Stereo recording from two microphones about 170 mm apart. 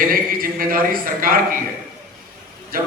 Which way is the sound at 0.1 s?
60° right (ahead or behind).